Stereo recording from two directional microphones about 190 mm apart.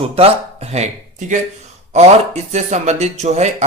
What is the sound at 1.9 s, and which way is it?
Speech, 35° right (ahead or behind).